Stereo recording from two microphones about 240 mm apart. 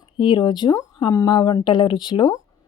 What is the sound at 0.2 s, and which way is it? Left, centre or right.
A woman's voice, centre.